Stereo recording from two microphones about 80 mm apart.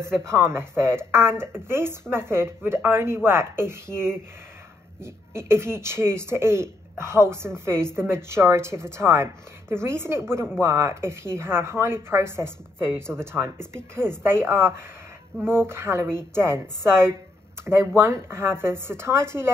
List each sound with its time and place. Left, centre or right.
0.0 s speech: right
5.0 s speech: right